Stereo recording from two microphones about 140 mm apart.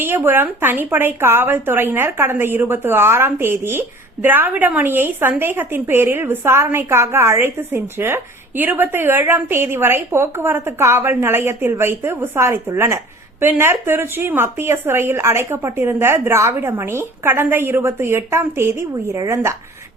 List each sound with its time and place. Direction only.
0.0 s speech: 15° right (ahead or behind)